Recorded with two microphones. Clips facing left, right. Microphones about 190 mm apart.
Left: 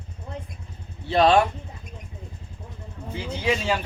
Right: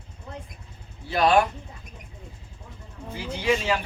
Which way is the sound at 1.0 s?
25° left (ahead or behind).